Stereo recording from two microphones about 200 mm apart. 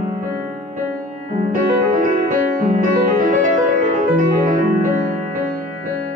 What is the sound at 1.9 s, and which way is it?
Music, 40° right (ahead or behind).